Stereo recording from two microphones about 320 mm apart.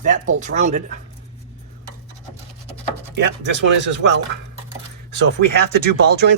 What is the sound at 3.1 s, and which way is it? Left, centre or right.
Speech, right.